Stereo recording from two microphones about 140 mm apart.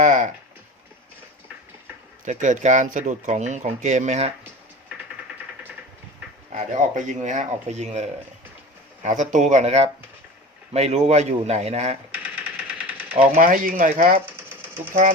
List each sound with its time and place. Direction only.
0.0 s a sound: 60° right (ahead or behind)
2.2 s speech: 60° right (ahead or behind)
6.5 s speech: 60° right (ahead or behind)
9.0 s a man's voice: 65° right (ahead or behind)
13.3 s speech: 80° right
14.3 s sewing machine: 15° right (ahead or behind)